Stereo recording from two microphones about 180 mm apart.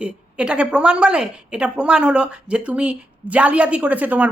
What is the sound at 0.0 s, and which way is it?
A woman's voice, 5° right (ahead or behind).